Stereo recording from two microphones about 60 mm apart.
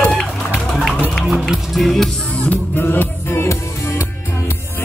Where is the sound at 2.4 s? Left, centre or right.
Left.